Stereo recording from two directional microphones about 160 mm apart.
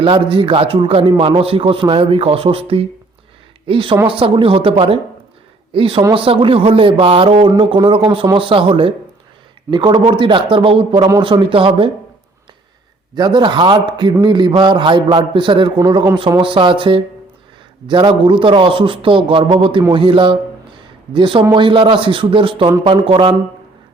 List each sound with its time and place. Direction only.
0.0 s a man's voice: 30° right (ahead or behind)
13.1 s a man's voice: 25° right (ahead or behind)